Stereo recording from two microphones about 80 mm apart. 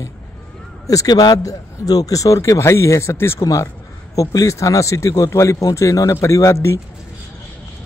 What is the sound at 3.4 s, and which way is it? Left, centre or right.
Speech, left.